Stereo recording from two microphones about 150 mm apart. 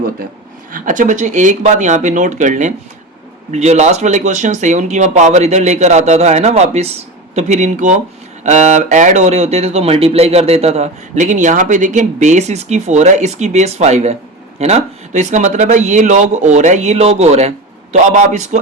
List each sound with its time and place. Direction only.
0.7 s speech: 60° right (ahead or behind)